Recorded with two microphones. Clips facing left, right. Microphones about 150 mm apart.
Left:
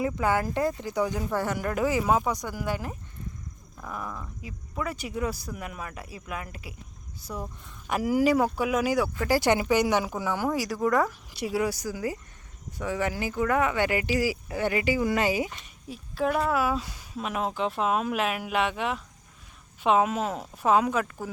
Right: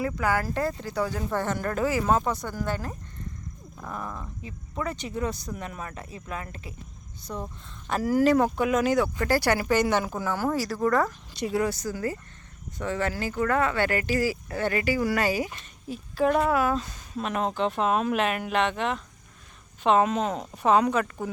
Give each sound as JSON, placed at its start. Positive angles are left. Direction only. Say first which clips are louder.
{"t": 0.0, "sound": "speech", "louder": "left 1 dB", "side_deg": 20}
{"t": 3.8, "sound": "speech", "louder": "right 1 dB", "side_deg": 0}
{"t": 15.9, "sound": "speech", "louder": "right 3 dB", "side_deg": 0}